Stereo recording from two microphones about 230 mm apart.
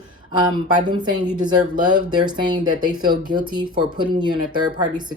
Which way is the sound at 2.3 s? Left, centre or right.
Centre.